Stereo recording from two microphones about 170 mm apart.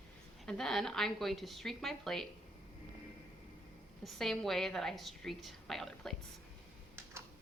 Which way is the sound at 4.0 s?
Centre (ahead or behind).